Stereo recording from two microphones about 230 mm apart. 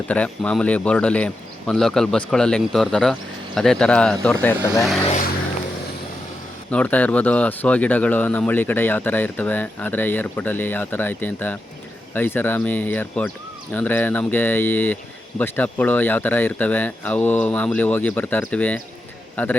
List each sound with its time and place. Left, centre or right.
0.1 s speech: centre
5.0 s vehicle: left
6.7 s speech: centre